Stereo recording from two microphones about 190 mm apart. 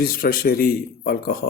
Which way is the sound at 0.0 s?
50° left (ahead or behind).